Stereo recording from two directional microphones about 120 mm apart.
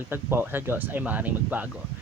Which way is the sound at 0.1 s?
20° right (ahead or behind).